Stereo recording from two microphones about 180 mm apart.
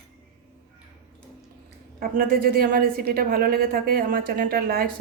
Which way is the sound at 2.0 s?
55° right (ahead or behind).